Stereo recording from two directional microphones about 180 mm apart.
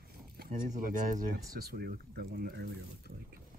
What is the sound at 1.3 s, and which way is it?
Speech, 60° right (ahead or behind).